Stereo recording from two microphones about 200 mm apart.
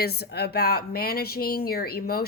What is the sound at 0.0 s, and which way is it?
Speech, 55° left (ahead or behind).